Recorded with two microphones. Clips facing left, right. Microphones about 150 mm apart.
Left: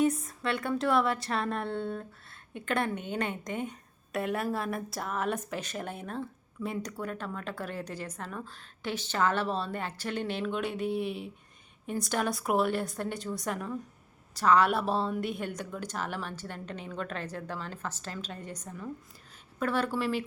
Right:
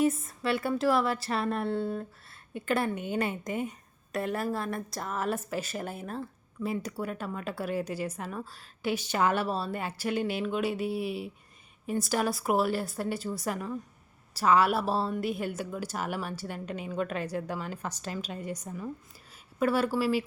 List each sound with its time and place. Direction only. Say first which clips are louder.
0.0 s speech: right 1 dB; 5° right (ahead or behind)